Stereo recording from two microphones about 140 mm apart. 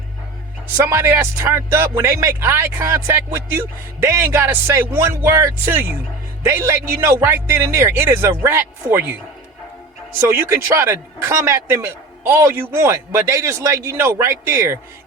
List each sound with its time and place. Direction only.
0.9 s speech: 20° right (ahead or behind)
10.2 s speech: 20° right (ahead or behind)